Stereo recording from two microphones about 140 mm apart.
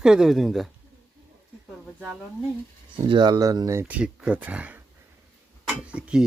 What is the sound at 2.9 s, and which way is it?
Speech, 35° right (ahead or behind).